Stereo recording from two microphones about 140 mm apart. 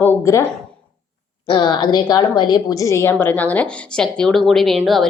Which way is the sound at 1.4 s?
30° left (ahead or behind).